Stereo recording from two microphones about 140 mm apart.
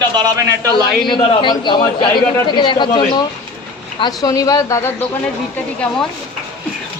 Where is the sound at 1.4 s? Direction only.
35° left (ahead or behind).